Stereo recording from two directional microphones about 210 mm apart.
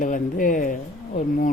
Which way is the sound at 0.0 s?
40° left (ahead or behind).